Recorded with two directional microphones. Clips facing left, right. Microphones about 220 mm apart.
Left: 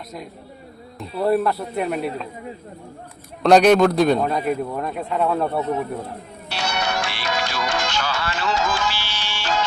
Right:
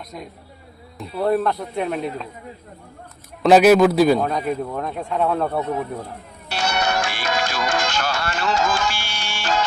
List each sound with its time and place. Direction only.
0.9 s a man's voice: 5° left (ahead or behind)
3.4 s a man's voice: 5° right (ahead or behind)
6.5 s music: 50° right (ahead or behind)